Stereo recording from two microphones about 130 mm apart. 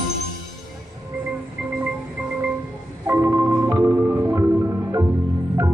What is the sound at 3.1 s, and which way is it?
Organ, 20° right (ahead or behind).